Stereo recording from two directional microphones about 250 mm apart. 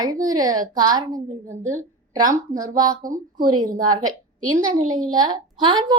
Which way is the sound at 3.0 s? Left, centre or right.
Right.